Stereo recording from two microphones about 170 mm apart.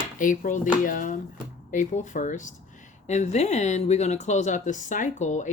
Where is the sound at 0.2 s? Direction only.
50° left (ahead or behind).